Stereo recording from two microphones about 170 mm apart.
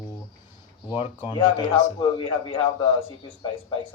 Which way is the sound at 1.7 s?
25° left (ahead or behind).